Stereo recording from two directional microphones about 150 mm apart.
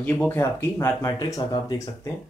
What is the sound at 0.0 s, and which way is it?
Speech, 10° left (ahead or behind).